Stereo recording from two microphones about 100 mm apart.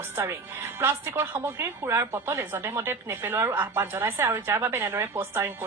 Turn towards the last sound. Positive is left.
turn(degrees=-25)  # may be behind; listen again after turning